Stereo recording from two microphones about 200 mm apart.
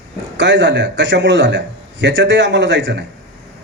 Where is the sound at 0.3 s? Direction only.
65° right (ahead or behind).